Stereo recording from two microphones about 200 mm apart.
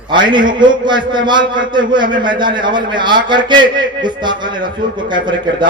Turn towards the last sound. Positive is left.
turn(degrees=-25)  # may be behind; listen again after turning